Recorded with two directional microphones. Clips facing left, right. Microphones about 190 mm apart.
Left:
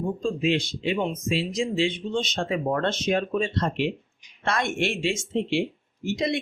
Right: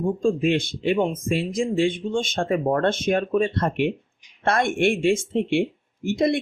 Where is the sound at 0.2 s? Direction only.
50° right (ahead or behind).